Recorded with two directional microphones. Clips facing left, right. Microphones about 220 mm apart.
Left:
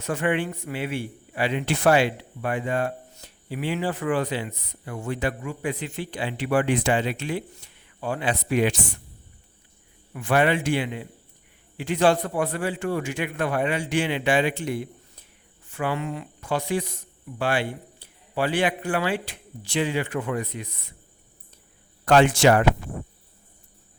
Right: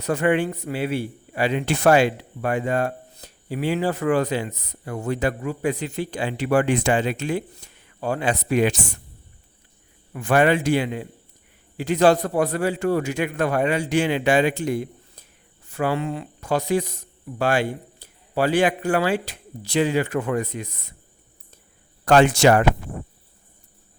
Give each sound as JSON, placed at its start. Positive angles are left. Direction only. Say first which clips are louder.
{"t": 0.0, "sound": "a man's voice", "louder": "right 4 dB", "side_deg": -40}
{"t": 10.1, "sound": "a man's voice", "louder": "right 3 dB", "side_deg": -45}
{"t": 22.0, "sound": "a man's voice", "louder": "right 2 dB", "side_deg": -40}